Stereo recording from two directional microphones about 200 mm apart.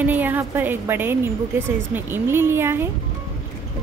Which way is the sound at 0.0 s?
10° right (ahead or behind).